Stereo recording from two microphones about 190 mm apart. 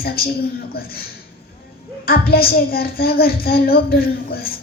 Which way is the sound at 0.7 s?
50° left (ahead or behind).